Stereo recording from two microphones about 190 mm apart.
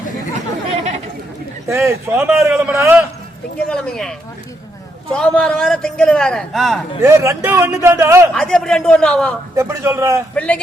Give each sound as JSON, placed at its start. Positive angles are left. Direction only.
{"t": 0.7, "sound": "chatter", "side_deg": -30}
{"t": 1.6, "sound": "a man's voice", "side_deg": -15}
{"t": 3.7, "sound": "a man's voice", "side_deg": 5}
{"t": 5.1, "sound": "a man's voice", "side_deg": 5}
{"t": 7.0, "sound": "a man's voice", "side_deg": -15}
{"t": 8.3, "sound": "a man's voice", "side_deg": 5}
{"t": 9.6, "sound": "a man's voice", "side_deg": -15}
{"t": 10.3, "sound": "a man's voice", "side_deg": 5}